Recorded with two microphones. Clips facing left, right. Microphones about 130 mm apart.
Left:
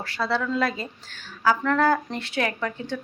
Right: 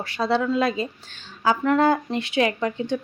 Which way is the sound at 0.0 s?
20° right (ahead or behind).